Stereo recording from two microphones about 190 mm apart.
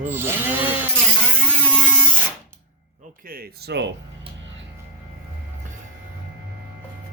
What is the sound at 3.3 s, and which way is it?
Speech, 55° right (ahead or behind).